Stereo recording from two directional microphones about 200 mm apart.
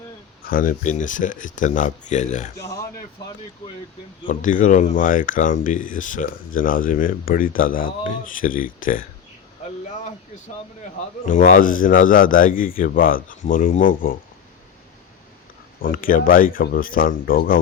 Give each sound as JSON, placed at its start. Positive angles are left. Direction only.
{"t": 0.4, "sound": "speech", "side_deg": 45}
{"t": 2.6, "sound": "speech", "side_deg": 15}
{"t": 4.3, "sound": "speech", "side_deg": 40}
{"t": 11.3, "sound": "speech", "side_deg": 40}
{"t": 15.8, "sound": "speech", "side_deg": 45}